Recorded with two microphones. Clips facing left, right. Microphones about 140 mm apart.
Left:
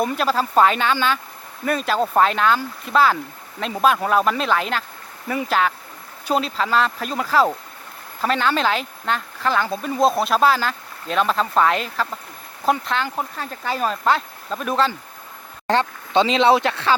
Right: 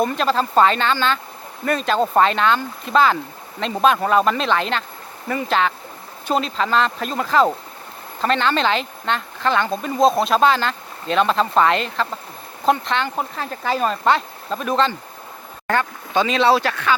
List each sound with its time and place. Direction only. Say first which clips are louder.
0.0 s speech: right 1 dB; 5° left (ahead or behind)
15.6 s speech: left 1 dB; 25° left (ahead or behind)